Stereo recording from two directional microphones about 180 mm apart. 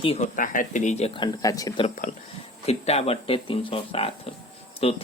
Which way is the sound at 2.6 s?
35° left (ahead or behind).